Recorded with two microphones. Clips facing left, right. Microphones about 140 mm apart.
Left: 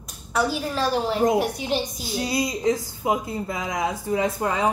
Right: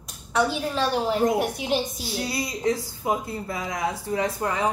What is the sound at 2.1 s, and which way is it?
Speech, 20° left (ahead or behind).